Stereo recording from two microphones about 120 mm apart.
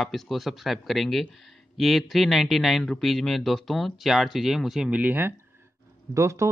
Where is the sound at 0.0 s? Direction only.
Centre (ahead or behind).